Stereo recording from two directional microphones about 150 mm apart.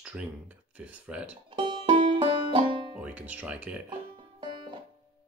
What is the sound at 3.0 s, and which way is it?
Speech, 10° right (ahead or behind).